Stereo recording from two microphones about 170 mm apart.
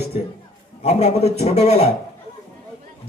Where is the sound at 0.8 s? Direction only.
40° left (ahead or behind).